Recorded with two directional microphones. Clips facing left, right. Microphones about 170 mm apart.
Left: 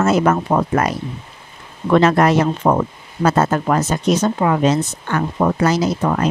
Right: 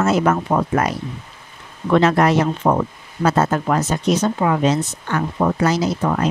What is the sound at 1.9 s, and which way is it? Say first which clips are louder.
Speech: left 2 dB; 45° left (ahead or behind).